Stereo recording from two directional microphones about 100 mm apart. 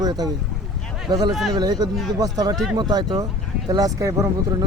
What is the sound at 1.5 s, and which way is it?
A man's voice, 40° right (ahead or behind).